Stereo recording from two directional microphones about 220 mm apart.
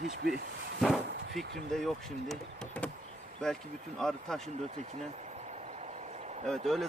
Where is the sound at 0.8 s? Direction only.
Centre (ahead or behind).